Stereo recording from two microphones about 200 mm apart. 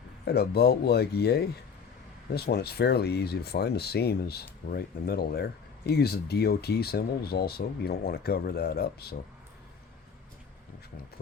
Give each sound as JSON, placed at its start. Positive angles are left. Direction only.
{"t": 0.3, "sound": "speech", "side_deg": 55}